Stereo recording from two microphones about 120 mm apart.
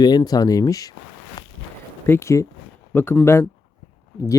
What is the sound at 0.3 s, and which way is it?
Speech, 30° left (ahead or behind).